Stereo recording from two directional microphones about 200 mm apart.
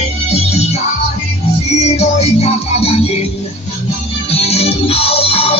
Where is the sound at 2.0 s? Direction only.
30° left (ahead or behind).